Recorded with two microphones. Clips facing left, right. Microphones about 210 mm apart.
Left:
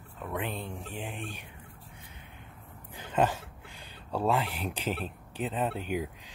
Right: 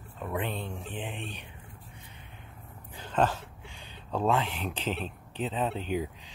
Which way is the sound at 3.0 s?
10° left (ahead or behind).